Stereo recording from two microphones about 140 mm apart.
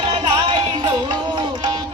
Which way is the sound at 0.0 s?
35° right (ahead or behind).